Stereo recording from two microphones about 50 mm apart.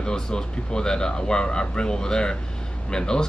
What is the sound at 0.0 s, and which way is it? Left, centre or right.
Speech, centre.